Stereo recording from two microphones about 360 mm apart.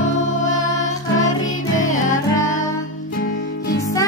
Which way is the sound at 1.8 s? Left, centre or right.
Left.